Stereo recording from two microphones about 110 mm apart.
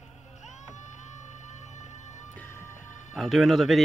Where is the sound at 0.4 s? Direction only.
90° left.